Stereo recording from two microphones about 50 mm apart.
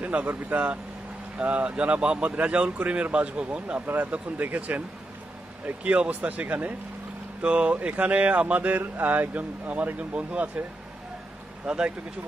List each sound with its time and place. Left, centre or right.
0.0 s a sound: right
0.5 s speech: right
5.9 s speech: right
11.6 s speech: centre